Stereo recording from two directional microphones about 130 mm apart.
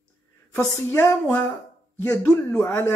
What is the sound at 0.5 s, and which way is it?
Speech, 20° left (ahead or behind).